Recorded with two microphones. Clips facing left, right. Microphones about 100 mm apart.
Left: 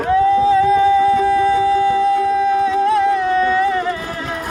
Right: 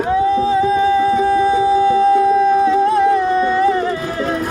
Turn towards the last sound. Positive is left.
turn(degrees=-30)  # may be behind; listen again after turning